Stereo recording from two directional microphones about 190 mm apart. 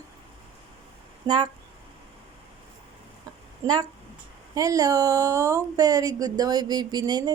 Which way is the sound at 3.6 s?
20° right (ahead or behind).